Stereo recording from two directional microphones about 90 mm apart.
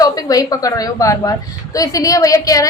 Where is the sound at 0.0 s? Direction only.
40° left (ahead or behind).